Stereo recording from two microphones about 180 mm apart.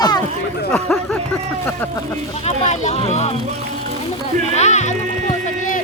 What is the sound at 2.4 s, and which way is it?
Speech, 40° left (ahead or behind).